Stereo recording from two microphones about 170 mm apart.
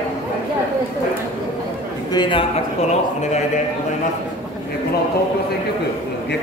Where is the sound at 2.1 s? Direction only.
30° left (ahead or behind).